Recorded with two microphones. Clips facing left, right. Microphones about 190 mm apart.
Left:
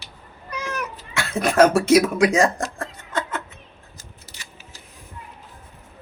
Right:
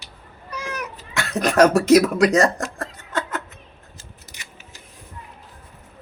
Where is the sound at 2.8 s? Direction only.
40° right (ahead or behind).